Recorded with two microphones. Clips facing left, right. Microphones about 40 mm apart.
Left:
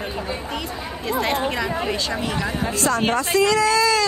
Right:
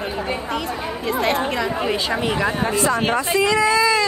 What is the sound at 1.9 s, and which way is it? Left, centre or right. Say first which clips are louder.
Speech: right 3 dB; centre.